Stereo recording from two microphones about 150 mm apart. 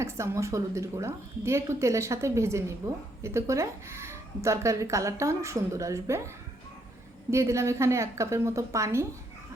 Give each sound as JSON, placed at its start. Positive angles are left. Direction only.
{"t": 0.0, "sound": "speech", "side_deg": -20}
{"t": 7.3, "sound": "speech", "side_deg": -20}